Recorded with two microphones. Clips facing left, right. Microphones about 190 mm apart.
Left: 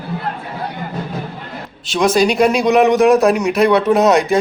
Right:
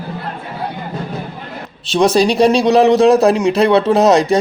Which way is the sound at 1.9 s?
30° right (ahead or behind).